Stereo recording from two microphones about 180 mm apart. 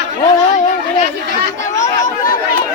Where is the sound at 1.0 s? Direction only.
45° left (ahead or behind).